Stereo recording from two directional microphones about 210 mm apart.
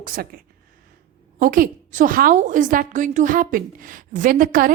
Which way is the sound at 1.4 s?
40° right (ahead or behind).